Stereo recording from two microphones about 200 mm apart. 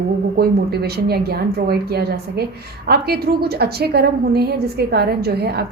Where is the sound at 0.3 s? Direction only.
50° right (ahead or behind).